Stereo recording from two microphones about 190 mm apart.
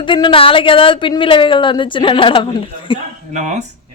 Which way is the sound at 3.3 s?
35° right (ahead or behind).